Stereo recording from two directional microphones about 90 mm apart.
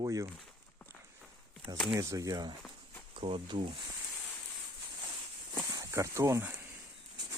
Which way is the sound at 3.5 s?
75° right (ahead or behind).